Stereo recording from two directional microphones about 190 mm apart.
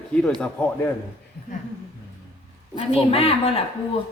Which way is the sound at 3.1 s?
30° left (ahead or behind).